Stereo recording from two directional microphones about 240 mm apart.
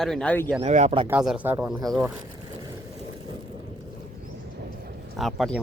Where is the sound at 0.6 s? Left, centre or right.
Right.